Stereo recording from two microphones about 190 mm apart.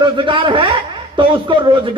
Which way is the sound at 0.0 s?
25° right (ahead or behind).